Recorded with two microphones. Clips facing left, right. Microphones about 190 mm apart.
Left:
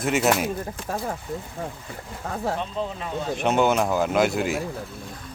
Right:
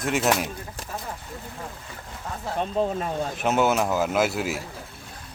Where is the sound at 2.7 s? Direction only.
45° right (ahead or behind).